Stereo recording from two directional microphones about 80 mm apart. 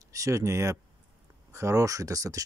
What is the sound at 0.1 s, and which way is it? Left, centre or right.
Speech, right.